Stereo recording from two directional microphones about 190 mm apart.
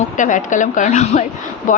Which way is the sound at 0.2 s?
40° left (ahead or behind).